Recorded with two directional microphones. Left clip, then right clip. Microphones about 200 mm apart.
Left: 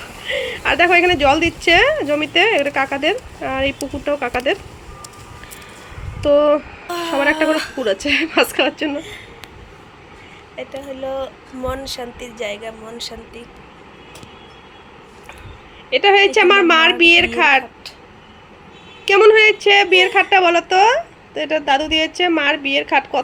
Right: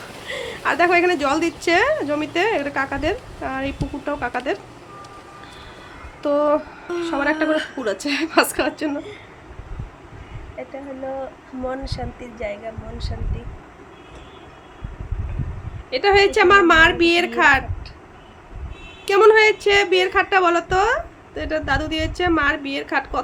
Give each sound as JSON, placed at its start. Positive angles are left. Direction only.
{"t": 0.4, "sound": "speech", "side_deg": 0}
{"t": 6.2, "sound": "speech", "side_deg": 0}
{"t": 11.6, "sound": "a woman's voice", "side_deg": -10}
{"t": 15.9, "sound": "speech", "side_deg": 5}
{"t": 19.0, "sound": "a woman's voice", "side_deg": 5}